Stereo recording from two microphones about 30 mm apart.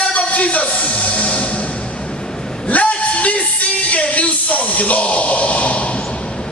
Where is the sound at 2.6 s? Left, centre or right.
Left.